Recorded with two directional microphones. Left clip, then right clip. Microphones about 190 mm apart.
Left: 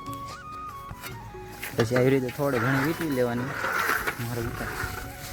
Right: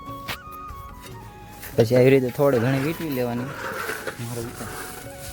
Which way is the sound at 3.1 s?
40° right (ahead or behind).